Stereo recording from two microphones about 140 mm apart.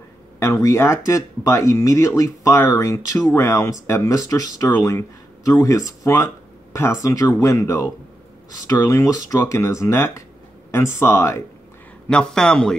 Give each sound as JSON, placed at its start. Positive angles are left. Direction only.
{"t": 0.4, "sound": "speech", "side_deg": 20}
{"t": 12.1, "sound": "a man's voice", "side_deg": 5}